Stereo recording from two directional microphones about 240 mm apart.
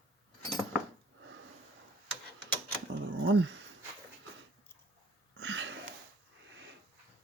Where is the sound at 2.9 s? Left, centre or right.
Right.